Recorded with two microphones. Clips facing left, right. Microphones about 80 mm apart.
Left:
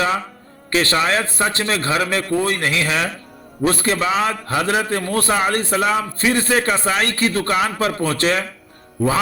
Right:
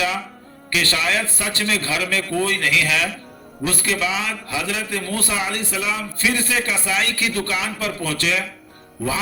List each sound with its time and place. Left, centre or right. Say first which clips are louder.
0.7 s a man's voice: left 4 dB; left